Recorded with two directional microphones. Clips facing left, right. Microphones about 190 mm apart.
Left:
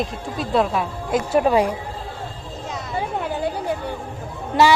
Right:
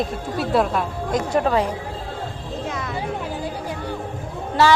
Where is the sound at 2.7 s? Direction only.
55° right (ahead or behind).